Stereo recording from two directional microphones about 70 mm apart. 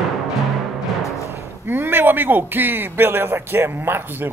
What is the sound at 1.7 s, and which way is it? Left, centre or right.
A man's voice, right.